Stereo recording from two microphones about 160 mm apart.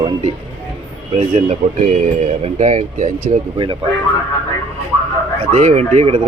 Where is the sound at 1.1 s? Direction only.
45° right (ahead or behind).